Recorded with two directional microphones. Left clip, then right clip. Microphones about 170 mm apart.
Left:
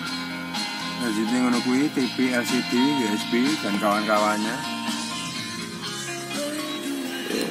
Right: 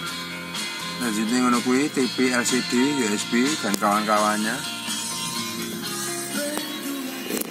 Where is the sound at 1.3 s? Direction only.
15° right (ahead or behind).